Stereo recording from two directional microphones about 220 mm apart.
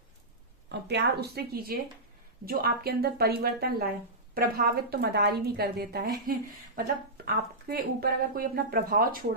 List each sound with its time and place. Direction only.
0.7 s a woman's voice: 50° right (ahead or behind)